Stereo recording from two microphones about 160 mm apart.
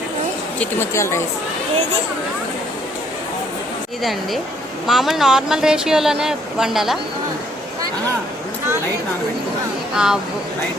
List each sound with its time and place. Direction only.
0.6 s speech: 15° left (ahead or behind)
4.9 s speech: centre (ahead or behind)
9.9 s speech: 5° right (ahead or behind)